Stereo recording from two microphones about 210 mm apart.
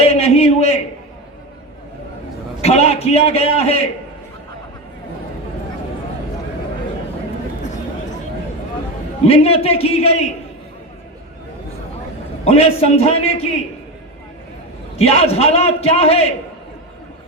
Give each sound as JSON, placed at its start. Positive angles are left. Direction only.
{"t": 0.0, "sound": "a sound", "side_deg": 30}
{"t": 2.6, "sound": "a man's voice", "side_deg": 30}
{"t": 9.2, "sound": "a man's voice", "side_deg": 30}
{"t": 12.5, "sound": "a man's voice", "side_deg": 30}
{"t": 14.9, "sound": "a man's voice", "side_deg": 30}